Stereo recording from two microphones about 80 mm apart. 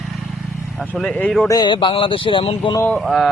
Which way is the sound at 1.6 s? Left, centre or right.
Left.